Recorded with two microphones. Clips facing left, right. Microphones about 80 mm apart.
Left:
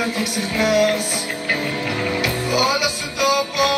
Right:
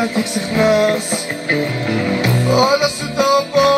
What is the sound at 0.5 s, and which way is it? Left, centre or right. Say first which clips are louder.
Music: right 4 dB; right.